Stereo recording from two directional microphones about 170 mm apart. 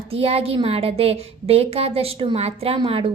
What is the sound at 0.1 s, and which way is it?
A woman's voice, 35° right (ahead or behind).